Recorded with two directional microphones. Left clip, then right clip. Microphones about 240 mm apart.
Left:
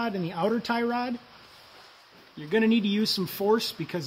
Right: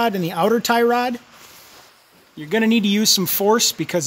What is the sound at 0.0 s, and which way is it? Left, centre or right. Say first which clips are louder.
Speech: right 10 dB; right.